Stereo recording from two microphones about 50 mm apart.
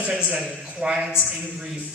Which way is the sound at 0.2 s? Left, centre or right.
Centre.